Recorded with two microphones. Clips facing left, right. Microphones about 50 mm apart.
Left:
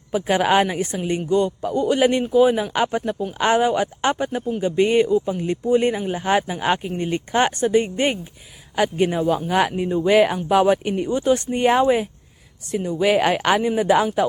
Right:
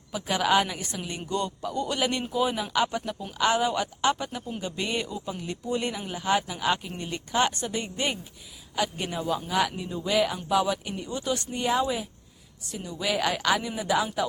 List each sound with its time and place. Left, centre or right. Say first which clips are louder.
0.1 s speech: left 6 dB; left
1.3 s speech: left 9 dB; centre
2.7 s speech: left 6 dB; left
11.1 s speech: left 10 dB; left